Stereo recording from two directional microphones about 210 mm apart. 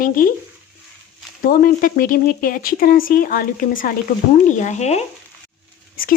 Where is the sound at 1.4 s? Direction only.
40° left (ahead or behind).